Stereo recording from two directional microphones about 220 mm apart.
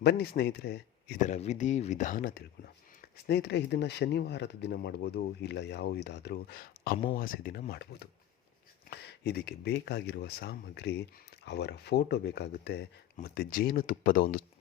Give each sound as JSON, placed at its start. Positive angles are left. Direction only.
{"t": 0.0, "sound": "speech", "side_deg": 50}
{"t": 1.3, "sound": "speech", "side_deg": 30}